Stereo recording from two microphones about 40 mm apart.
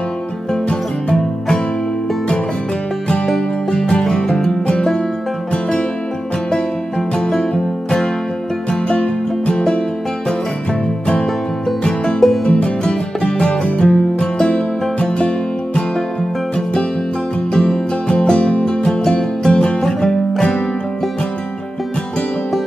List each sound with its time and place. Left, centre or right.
3.7 s music: left
4.0 s music: centre
7.2 s music: centre
8.8 s music: left
11.8 s music: left
17.5 s music: centre